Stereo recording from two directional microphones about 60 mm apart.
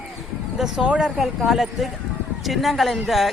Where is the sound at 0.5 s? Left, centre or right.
Centre.